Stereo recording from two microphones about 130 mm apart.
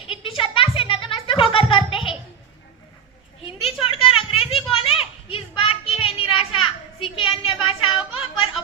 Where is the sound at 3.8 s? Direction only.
45° left (ahead or behind).